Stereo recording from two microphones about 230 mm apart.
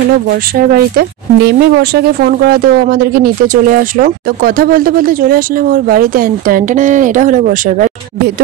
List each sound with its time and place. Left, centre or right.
0.6 s speech: right